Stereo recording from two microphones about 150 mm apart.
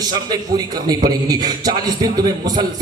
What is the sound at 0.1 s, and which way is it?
A man's voice, 25° right (ahead or behind).